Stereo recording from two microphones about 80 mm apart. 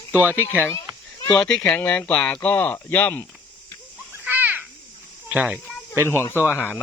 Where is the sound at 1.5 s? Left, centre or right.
Centre.